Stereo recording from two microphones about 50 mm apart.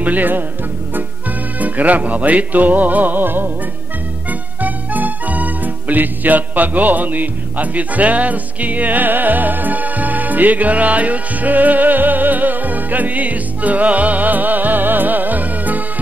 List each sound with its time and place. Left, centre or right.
0.0 s music: right
1.6 s music: right